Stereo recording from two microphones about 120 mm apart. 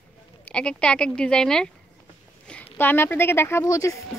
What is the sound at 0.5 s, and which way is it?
Speech, 10° left (ahead or behind).